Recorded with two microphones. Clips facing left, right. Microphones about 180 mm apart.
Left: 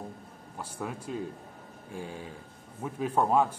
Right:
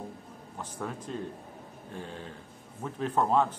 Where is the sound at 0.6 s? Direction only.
10° left (ahead or behind).